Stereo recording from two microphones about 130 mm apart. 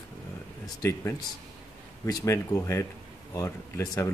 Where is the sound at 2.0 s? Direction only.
25° left (ahead or behind).